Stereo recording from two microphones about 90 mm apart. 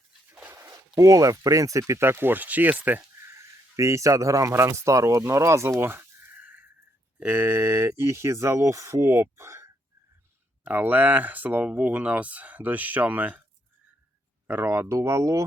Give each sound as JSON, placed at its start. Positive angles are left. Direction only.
{"t": 0.4, "sound": "a sound", "side_deg": -35}
{"t": 0.9, "sound": "speech", "side_deg": -40}
{"t": 1.9, "sound": "speech", "side_deg": -25}
{"t": 3.2, "sound": "speech", "side_deg": -35}
{"t": 14.4, "sound": "speech", "side_deg": -25}